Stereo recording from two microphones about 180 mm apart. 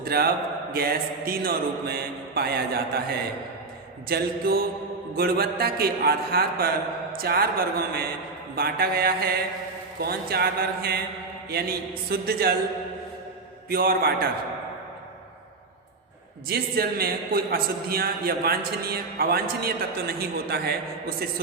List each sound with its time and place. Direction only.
0.0 s a man's voice: 60° right (ahead or behind)
13.7 s a man's voice: 55° right (ahead or behind)
16.5 s a man's voice: 60° right (ahead or behind)